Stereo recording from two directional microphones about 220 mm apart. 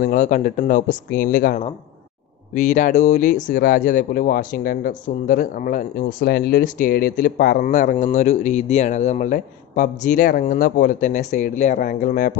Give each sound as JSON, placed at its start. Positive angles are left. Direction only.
{"t": 0.0, "sound": "speech", "side_deg": 35}